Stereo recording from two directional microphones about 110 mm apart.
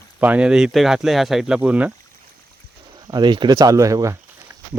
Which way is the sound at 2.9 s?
40° right (ahead or behind).